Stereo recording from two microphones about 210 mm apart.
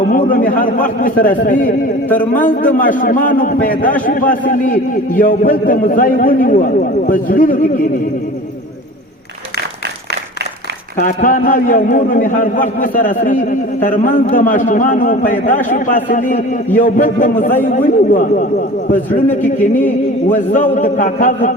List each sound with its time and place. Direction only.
0.1 s a man's voice: 40° left (ahead or behind)
10.9 s a man's voice: 40° left (ahead or behind)
19.3 s speech: 10° left (ahead or behind)
20.5 s a man's voice: 40° left (ahead or behind)